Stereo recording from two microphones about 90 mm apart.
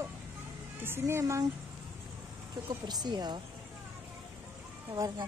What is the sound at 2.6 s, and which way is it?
Speech, 55° right (ahead or behind).